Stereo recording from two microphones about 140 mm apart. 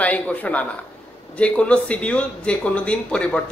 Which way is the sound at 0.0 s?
10° left (ahead or behind).